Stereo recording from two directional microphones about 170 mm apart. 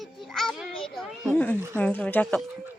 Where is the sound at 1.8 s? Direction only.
10° left (ahead or behind).